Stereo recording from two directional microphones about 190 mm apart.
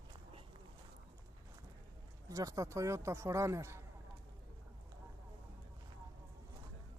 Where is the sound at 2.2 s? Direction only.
15° right (ahead or behind).